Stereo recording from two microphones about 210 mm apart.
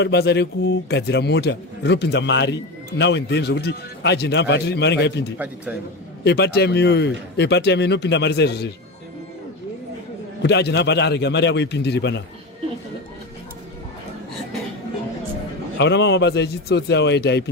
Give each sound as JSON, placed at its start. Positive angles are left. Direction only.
{"t": 0.0, "sound": "a man's voice", "side_deg": 50}
{"t": 10.4, "sound": "a man's voice", "side_deg": 55}
{"t": 15.8, "sound": "a man's voice", "side_deg": 55}